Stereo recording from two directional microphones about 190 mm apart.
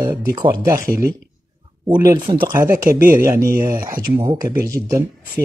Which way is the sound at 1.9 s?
20° right (ahead or behind).